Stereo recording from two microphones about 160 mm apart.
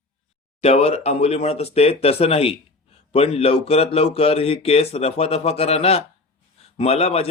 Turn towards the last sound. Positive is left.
turn(degrees=40)  # may be behind; listen again after turning